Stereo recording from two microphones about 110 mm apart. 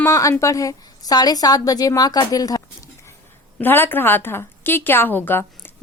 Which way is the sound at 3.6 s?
20° left (ahead or behind).